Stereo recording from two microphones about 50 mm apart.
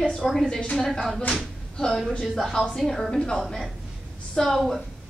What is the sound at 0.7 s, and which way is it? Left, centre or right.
Speech, centre.